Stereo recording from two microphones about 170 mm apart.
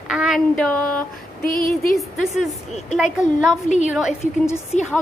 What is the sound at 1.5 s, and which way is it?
Speech, 55° left (ahead or behind).